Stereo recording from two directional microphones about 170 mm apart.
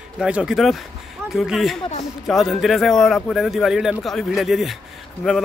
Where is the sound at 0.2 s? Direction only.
5° right (ahead or behind).